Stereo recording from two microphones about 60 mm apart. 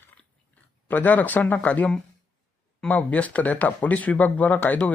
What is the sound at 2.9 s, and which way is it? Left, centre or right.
Speech, left.